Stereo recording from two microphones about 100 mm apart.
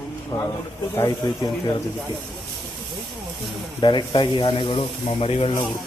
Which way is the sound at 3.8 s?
55° left (ahead or behind).